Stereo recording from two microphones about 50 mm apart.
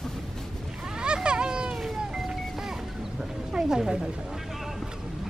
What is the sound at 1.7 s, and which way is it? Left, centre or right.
Music, centre.